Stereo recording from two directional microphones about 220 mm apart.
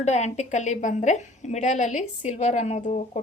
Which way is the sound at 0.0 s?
30° left (ahead or behind).